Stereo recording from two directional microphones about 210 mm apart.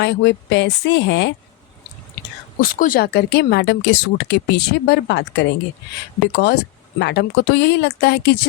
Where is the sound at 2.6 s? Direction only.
40° left (ahead or behind).